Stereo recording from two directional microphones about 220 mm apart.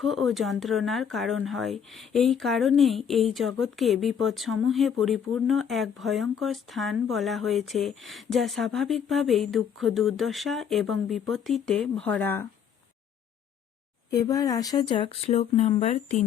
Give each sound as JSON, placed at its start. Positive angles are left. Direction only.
{"t": 0.0, "sound": "speech", "side_deg": 0}
{"t": 14.1, "sound": "speech", "side_deg": 15}